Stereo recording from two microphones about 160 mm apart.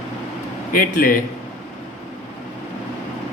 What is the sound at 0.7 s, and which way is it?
Speech, 60° left (ahead or behind).